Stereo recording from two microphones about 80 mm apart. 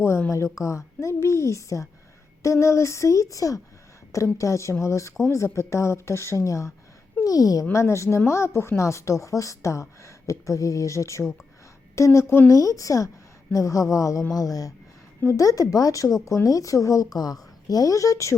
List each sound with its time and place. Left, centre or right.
0.0 s a woman's voice: left